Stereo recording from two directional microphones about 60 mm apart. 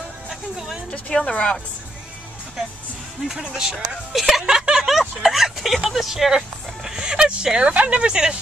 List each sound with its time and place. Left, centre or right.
0.3 s music: centre
0.9 s speech: left
3.3 s speech: centre